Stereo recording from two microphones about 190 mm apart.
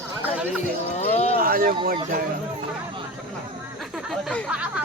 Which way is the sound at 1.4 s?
50° right (ahead or behind).